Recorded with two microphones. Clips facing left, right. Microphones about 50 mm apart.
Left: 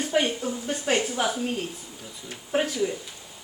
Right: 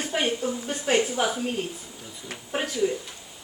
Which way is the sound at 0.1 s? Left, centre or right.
Centre.